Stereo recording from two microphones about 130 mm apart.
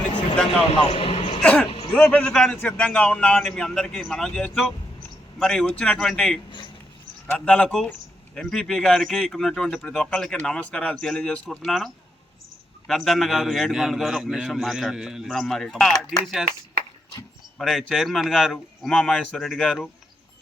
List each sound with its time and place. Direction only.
0.8 s a sound: 45° left (ahead or behind)
1.4 s a man's voice: 10° left (ahead or behind)
12.9 s a man's voice: centre (ahead or behind)
17.6 s a man's voice: centre (ahead or behind)